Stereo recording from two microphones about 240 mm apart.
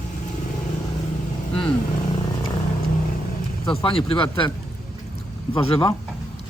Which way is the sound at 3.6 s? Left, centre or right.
Left.